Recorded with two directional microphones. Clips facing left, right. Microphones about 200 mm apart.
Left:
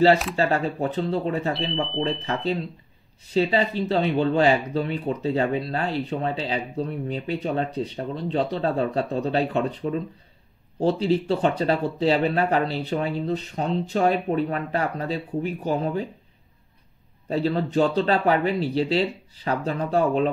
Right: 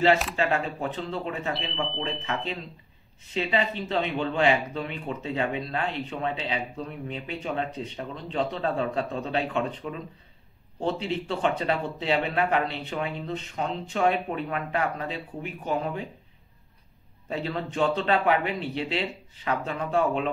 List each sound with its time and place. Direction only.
0.4 s speech: 40° left (ahead or behind)
17.3 s speech: 35° left (ahead or behind)